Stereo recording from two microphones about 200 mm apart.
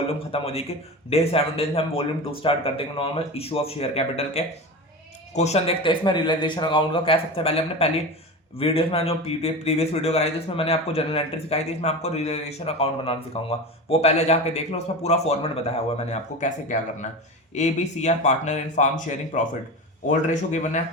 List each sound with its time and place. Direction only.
0.3 s a man's voice: 30° left (ahead or behind)